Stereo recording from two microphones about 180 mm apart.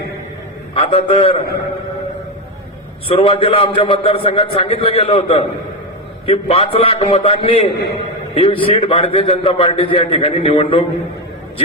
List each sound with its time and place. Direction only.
0.7 s a man's voice: 30° left (ahead or behind)
3.1 s a man's voice: 30° left (ahead or behind)